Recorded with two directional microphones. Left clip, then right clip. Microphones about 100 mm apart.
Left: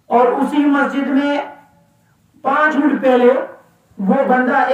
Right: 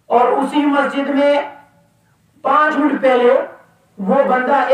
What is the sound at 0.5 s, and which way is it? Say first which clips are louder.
Speech: even; 40° right (ahead or behind).